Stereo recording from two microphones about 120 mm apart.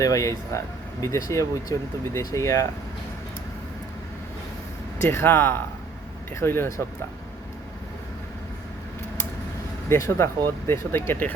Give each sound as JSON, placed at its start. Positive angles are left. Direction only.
{"t": 0.0, "sound": "speech", "side_deg": 30}
{"t": 5.0, "sound": "speech", "side_deg": 15}
{"t": 9.9, "sound": "speech", "side_deg": 20}